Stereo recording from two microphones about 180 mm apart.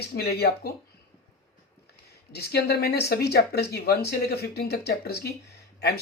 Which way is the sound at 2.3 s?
65° left (ahead or behind).